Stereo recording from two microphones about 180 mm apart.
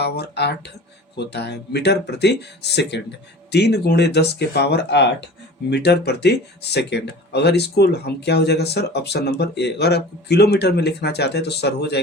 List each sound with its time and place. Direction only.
0.0 s speech: 65° left (ahead or behind)